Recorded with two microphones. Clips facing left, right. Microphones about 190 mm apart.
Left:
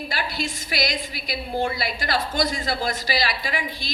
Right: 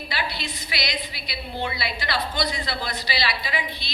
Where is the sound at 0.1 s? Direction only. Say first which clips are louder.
Even; 45° left (ahead or behind).